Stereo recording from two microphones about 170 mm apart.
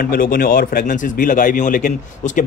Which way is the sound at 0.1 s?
60° left (ahead or behind).